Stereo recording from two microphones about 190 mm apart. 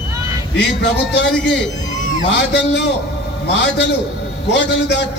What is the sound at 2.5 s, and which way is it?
Speech, 65° left (ahead or behind).